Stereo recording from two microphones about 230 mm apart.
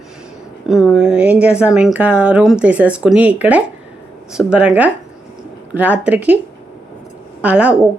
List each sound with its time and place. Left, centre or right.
0.7 s a woman's voice: centre
7.4 s a woman's voice: centre